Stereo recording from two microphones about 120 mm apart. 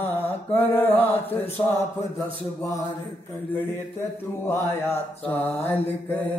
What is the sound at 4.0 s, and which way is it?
Mantra, 20° left (ahead or behind).